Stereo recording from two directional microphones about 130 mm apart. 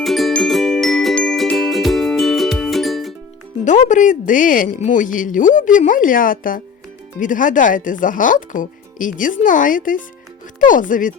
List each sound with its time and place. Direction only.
0.0 s music: centre (ahead or behind)
3.6 s a woman's voice: 70° left (ahead or behind); by 11.1 s 90° left